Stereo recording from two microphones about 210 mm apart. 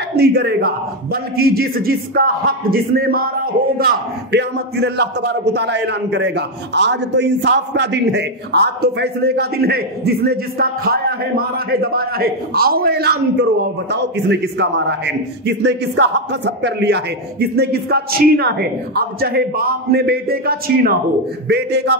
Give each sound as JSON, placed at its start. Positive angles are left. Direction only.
{"t": 0.1, "sound": "a man's voice", "side_deg": -50}